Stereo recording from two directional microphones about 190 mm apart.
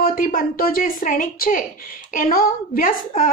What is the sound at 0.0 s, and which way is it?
A woman's voice, 45° left (ahead or behind).